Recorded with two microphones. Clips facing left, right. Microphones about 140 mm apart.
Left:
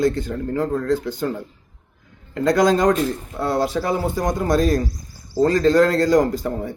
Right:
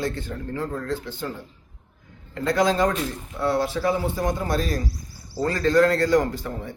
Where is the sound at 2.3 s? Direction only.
45° left (ahead or behind).